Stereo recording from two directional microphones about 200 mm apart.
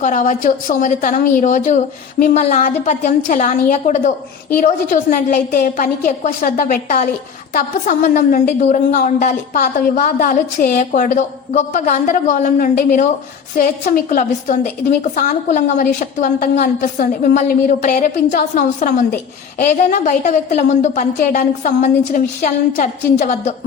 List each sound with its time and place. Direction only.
0.0 s a woman's voice: 40° left (ahead or behind)
2.3 s a woman's voice: 35° left (ahead or behind)